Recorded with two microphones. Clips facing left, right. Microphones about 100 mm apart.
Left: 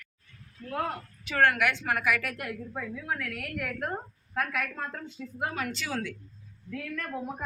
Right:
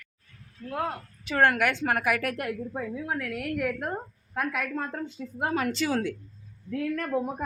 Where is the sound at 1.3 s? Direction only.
35° right (ahead or behind).